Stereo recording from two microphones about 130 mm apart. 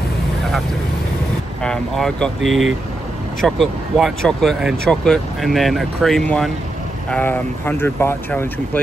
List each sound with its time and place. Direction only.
1.6 s speech: 5° left (ahead or behind)